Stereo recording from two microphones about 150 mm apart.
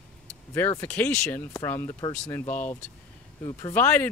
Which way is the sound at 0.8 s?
15° left (ahead or behind).